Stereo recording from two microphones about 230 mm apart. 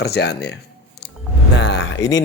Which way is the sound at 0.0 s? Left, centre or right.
Left.